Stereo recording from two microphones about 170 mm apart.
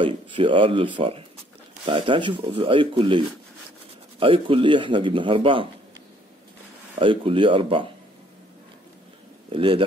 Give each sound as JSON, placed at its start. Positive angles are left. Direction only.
{"t": 0.0, "sound": "speech", "side_deg": -30}
{"t": 7.0, "sound": "speech", "side_deg": -30}
{"t": 9.5, "sound": "speech", "side_deg": -30}